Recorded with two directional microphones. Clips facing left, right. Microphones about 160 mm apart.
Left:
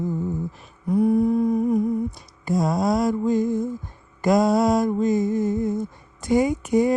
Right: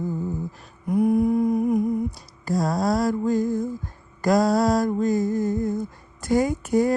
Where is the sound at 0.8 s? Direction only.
10° right (ahead or behind).